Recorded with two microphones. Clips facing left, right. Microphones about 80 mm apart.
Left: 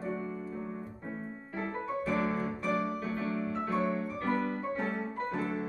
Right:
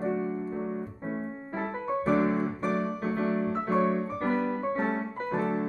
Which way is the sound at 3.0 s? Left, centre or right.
Right.